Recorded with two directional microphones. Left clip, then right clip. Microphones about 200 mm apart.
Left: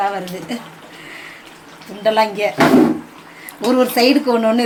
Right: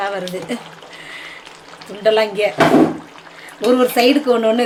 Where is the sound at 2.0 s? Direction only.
5° right (ahead or behind).